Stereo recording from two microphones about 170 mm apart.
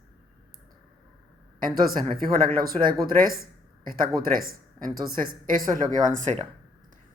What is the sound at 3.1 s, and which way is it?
Speech, 55° right (ahead or behind).